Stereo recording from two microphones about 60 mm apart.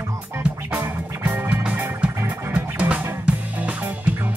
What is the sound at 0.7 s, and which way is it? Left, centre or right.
Music, right.